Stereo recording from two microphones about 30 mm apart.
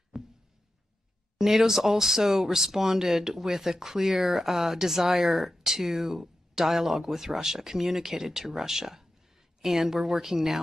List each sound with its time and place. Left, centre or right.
0.1 s heart sounds: centre
1.4 s speech: centre